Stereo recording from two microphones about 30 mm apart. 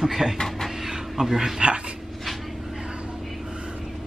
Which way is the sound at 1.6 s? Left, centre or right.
Right.